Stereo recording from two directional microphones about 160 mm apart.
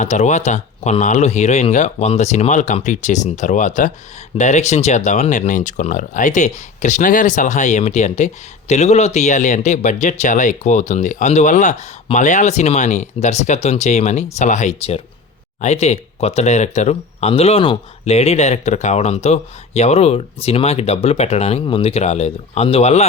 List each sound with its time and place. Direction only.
0.0 s speech: 45° left (ahead or behind)